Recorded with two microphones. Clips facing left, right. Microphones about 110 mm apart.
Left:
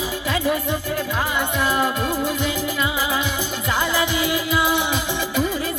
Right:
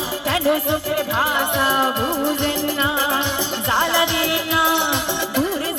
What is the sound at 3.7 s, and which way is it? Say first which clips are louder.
Music: right 3 dB; 30° right (ahead or behind).